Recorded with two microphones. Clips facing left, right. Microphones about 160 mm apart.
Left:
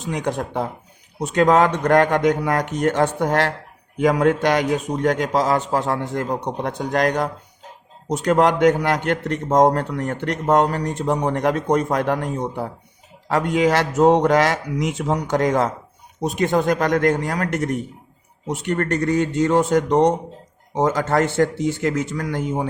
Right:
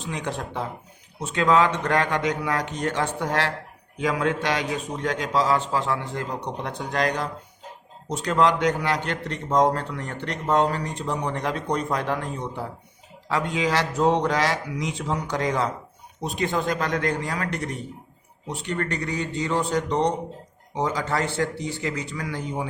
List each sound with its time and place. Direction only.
0.0 s a man's voice: 45° left (ahead or behind)